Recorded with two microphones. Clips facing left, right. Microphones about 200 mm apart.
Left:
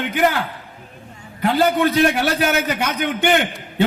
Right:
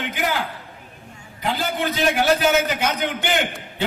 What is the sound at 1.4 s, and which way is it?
A man's voice, 60° left (ahead or behind).